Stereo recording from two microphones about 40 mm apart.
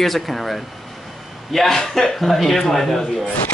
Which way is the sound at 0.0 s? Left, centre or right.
Centre.